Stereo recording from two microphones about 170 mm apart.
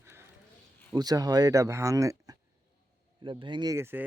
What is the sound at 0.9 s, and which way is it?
Speech, 20° right (ahead or behind).